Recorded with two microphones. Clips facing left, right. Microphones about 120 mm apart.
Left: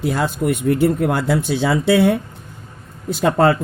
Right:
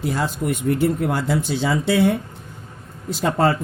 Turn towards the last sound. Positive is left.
turn(degrees=65)  # may be behind; listen again after turning